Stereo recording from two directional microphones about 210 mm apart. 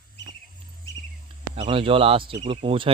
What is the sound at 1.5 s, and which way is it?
Speech, 25° right (ahead or behind).